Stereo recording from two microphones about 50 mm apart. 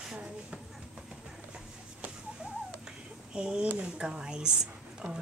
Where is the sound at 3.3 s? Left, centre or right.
Centre.